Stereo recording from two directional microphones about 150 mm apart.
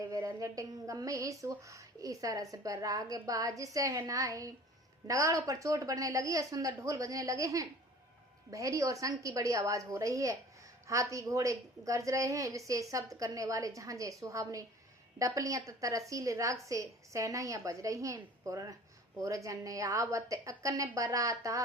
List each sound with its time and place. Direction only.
0.0 s a woman's voice: 20° right (ahead or behind)